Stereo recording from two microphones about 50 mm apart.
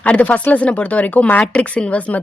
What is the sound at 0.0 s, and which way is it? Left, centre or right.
Speech, left.